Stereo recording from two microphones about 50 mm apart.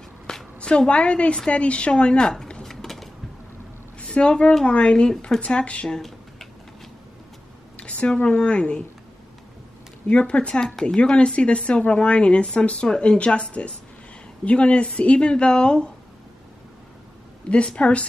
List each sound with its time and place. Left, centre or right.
0.6 s a woman's voice: left
2.7 s a sound: centre
4.1 s speech: centre
7.7 s a sound: centre
8.3 s speech: left
10.0 s speech: left
17.5 s speech: left